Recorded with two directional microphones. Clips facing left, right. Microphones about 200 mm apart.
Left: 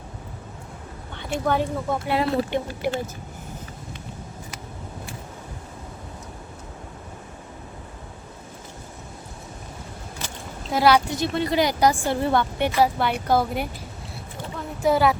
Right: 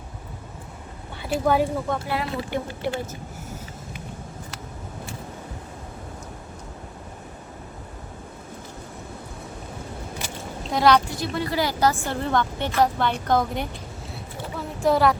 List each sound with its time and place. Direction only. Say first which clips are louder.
1.1 s speech: right 2 dB; 5° right (ahead or behind)
2.0 s speech: left 5 dB; 25° left (ahead or behind)
2.8 s a woman's voice: left 2 dB; 10° left (ahead or behind)
10.7 s a woman's voice: even; 5° left (ahead or behind)
11.1 s a woman's voice: left 3 dB; 20° left (ahead or behind); by 13.7 s 5° left (ahead or behind)
14.8 s speech: even; centre (ahead or behind)